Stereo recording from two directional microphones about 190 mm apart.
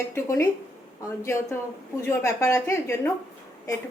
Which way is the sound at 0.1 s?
15° left (ahead or behind).